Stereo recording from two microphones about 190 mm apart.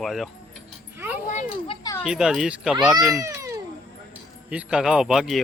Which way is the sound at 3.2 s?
15° right (ahead or behind).